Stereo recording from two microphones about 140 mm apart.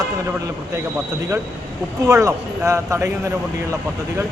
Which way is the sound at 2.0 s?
25° right (ahead or behind).